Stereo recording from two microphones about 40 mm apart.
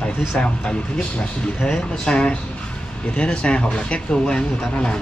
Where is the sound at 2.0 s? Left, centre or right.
Left.